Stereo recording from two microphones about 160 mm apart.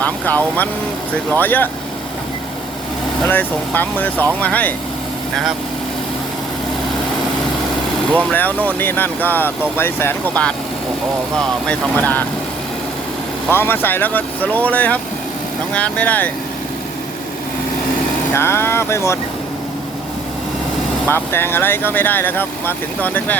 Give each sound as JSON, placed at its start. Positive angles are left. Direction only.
{"t": 0.0, "sound": "speech", "side_deg": 10}
{"t": 3.2, "sound": "speech", "side_deg": 10}
{"t": 8.2, "sound": "speech", "side_deg": 10}
{"t": 13.5, "sound": "speech", "side_deg": 15}
{"t": 18.3, "sound": "speech", "side_deg": 15}
{"t": 21.1, "sound": "speech", "side_deg": 15}